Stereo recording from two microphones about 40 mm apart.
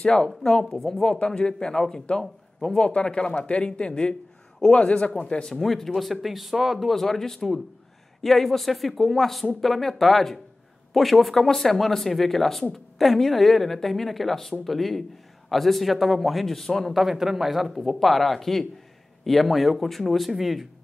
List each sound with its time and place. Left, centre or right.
0.0 s a man's voice: centre
0.7 s speech: centre
1.2 s a man's voice: left
5.1 s a man's voice: centre
5.6 s speech: centre
6.9 s speech: centre
16.9 s speech: centre